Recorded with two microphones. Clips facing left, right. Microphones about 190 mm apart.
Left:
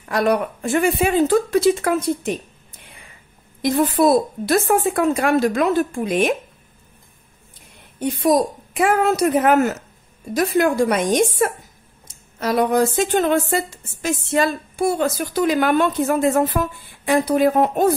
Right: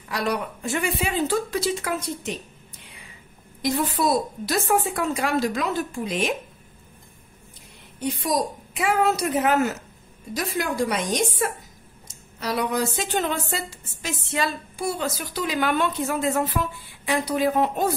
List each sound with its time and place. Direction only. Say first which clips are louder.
0.1 s a woman's voice: left 8 dB; 50° left (ahead or behind)
3.6 s a woman's voice: left 7 dB; 55° left (ahead or behind)
8.0 s a woman's voice: left 7 dB; 55° left (ahead or behind)